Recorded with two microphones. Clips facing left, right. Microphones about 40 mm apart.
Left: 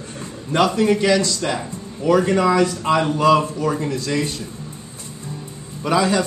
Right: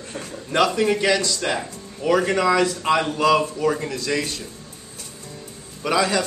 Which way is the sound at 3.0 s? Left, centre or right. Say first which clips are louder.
Left 5 dB; centre.